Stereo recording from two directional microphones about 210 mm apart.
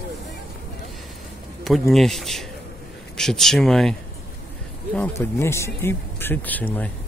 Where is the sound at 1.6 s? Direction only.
Centre (ahead or behind).